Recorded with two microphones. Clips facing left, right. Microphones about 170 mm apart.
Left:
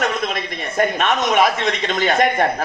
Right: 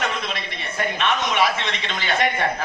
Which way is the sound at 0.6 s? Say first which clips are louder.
Left 6 dB; 45° left (ahead or behind).